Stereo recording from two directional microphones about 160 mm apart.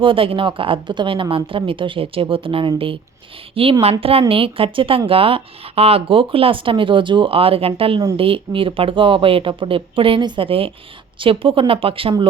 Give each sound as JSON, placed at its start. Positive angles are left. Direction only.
{"t": 0.0, "sound": "a woman's voice", "side_deg": -35}